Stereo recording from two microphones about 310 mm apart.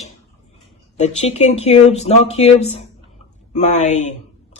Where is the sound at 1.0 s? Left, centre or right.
Left.